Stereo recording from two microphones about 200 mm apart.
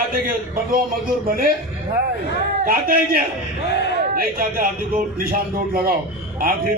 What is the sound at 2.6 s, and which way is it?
A man's voice, 45° right (ahead or behind).